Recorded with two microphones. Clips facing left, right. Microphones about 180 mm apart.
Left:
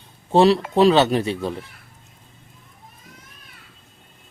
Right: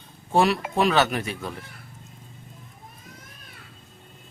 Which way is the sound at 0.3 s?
30° left (ahead or behind).